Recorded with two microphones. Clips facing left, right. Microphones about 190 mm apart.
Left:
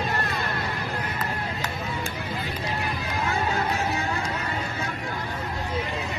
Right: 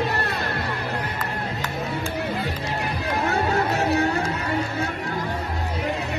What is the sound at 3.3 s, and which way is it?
Music, 65° right (ahead or behind).